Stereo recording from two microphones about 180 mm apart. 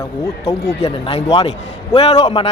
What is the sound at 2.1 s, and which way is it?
Speech, 25° left (ahead or behind).